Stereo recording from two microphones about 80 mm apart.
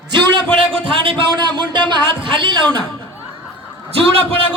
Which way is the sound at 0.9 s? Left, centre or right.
Right.